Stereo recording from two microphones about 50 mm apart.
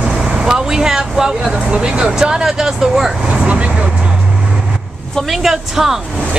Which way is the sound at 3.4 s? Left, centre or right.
Right.